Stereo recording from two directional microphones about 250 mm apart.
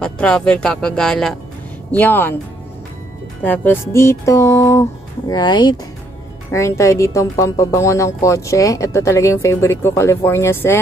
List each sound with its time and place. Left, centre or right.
0.0 s speech: centre
3.4 s speech: centre